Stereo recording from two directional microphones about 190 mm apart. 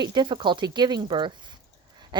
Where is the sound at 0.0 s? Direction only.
25° right (ahead or behind).